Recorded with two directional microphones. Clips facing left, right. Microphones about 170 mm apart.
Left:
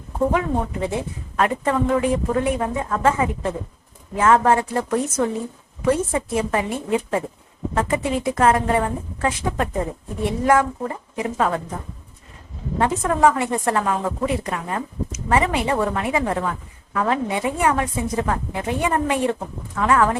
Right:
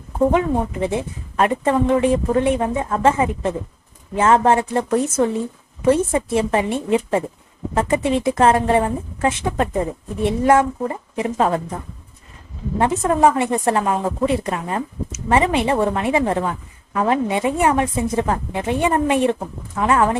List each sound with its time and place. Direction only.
0.3 s a woman's voice: 20° right (ahead or behind)
12.8 s a woman's voice: 25° right (ahead or behind)